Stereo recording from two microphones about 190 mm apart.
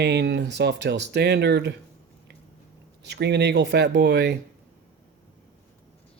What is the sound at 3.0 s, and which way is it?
Speech, 65° right (ahead or behind).